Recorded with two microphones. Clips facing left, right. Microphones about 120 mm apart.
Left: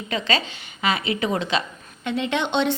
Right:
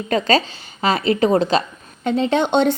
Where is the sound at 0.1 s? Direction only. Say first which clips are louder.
Right 7 dB; 40° right (ahead or behind).